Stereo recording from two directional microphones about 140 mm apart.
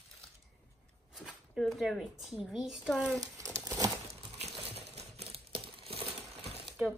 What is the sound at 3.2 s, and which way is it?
Crumpling, 25° right (ahead or behind).